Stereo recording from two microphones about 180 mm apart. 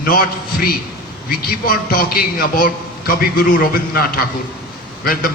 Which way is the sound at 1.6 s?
55° left (ahead or behind).